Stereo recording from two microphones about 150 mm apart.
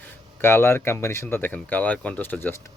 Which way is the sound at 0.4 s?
15° left (ahead or behind).